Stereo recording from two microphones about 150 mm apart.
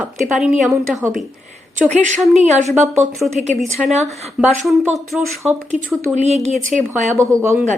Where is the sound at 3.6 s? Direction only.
Centre (ahead or behind).